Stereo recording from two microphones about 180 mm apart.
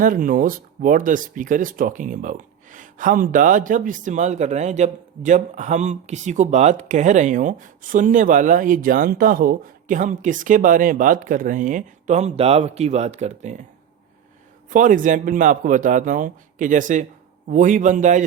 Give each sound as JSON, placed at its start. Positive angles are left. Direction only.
{"t": 0.0, "sound": "speech", "side_deg": -50}
{"t": 14.7, "sound": "speech", "side_deg": -45}